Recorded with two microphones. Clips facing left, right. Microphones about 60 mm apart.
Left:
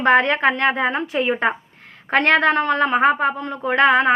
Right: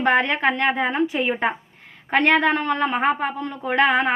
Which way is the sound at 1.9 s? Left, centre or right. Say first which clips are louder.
Left 1 dB; left.